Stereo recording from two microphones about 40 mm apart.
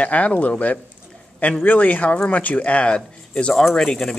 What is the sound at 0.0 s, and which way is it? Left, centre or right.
Speech, left.